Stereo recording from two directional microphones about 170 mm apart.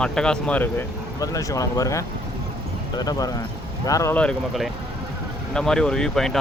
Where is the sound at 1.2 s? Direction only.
20° left (ahead or behind).